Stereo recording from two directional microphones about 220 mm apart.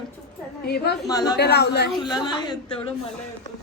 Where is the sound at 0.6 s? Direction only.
45° left (ahead or behind).